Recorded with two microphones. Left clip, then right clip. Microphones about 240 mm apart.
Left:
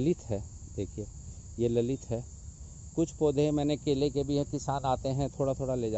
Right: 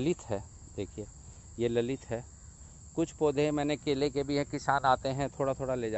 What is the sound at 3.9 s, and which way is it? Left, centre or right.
Speech, right.